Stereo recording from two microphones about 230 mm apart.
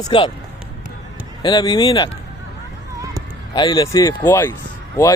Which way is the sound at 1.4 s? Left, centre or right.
Centre.